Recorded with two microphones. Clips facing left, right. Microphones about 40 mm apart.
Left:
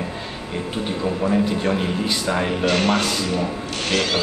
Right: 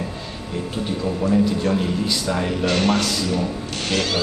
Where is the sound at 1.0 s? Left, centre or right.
Left.